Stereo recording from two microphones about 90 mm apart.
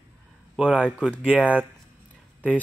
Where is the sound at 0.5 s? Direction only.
5° right (ahead or behind).